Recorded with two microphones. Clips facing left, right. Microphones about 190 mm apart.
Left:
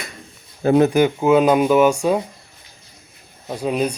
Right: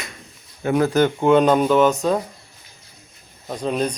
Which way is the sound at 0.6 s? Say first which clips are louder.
Left 5 dB; 25° left (ahead or behind).